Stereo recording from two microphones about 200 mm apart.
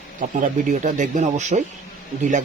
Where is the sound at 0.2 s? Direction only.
40° right (ahead or behind).